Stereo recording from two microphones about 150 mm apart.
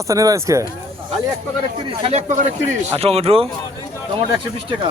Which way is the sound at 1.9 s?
40° right (ahead or behind).